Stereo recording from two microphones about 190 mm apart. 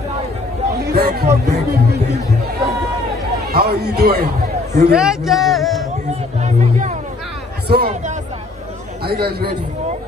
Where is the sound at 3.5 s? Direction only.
55° right (ahead or behind).